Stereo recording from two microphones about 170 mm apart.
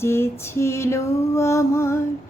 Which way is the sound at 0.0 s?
15° left (ahead or behind).